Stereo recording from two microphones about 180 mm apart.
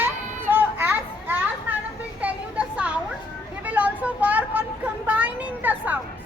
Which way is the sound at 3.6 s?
10° right (ahead or behind).